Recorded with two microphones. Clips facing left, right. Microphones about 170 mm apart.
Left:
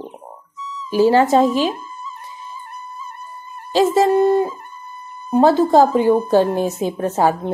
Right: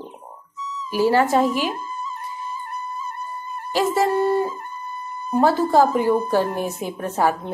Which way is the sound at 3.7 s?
20° left (ahead or behind).